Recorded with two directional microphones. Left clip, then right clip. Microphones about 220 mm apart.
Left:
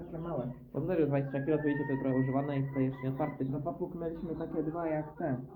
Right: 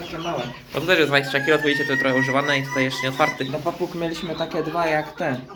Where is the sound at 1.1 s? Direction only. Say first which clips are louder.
Right 14 dB; 10° right (ahead or behind).